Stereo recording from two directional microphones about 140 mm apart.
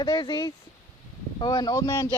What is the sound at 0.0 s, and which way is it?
Speech, 30° left (ahead or behind).